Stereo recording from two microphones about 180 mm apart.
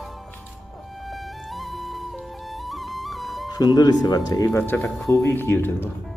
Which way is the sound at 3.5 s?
20° left (ahead or behind).